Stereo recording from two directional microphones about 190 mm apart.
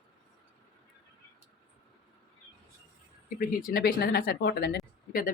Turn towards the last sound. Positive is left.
turn(degrees=50)  # may be behind; listen again after turning